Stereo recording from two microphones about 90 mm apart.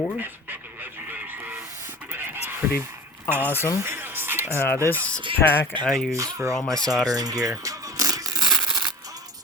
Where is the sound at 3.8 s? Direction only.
25° right (ahead or behind).